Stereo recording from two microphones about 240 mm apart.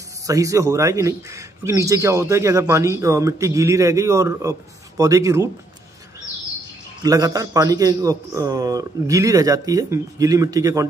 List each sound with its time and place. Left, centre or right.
0.3 s speech: centre
7.0 s speech: centre